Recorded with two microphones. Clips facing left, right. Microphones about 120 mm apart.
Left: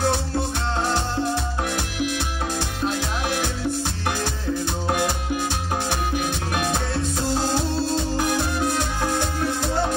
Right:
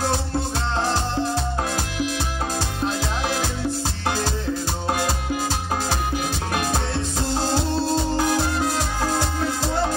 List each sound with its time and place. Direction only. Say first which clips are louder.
1.3 s music: right 1 dB; 30° right (ahead or behind)
5.9 s music: even; 25° right (ahead or behind)